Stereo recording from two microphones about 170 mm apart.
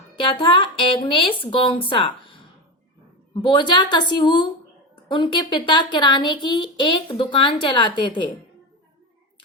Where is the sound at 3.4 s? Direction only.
25° left (ahead or behind).